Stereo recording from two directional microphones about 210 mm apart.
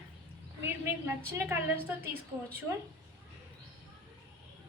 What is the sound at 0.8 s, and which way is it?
A woman's voice, 10° right (ahead or behind).